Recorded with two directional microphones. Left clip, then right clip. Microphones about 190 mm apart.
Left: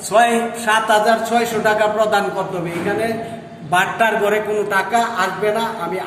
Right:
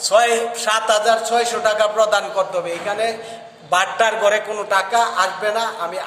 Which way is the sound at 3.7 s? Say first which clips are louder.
Left 1 dB; 55° right (ahead or behind).